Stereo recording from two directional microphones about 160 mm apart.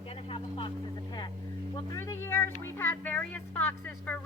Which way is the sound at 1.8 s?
15° left (ahead or behind).